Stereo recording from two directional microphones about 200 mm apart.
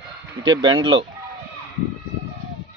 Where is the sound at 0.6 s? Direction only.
75° right (ahead or behind).